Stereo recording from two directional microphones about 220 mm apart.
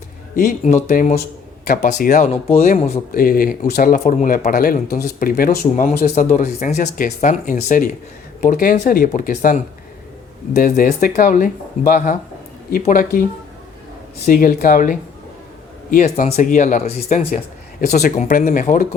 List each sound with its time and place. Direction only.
0.3 s speech: 40° left (ahead or behind)
3.2 s speech: 40° left (ahead or behind)
14.3 s speech: 40° left (ahead or behind)